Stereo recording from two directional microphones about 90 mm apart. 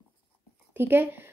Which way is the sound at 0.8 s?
25° right (ahead or behind).